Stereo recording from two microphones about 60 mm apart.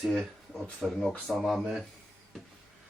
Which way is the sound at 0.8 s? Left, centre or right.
Centre.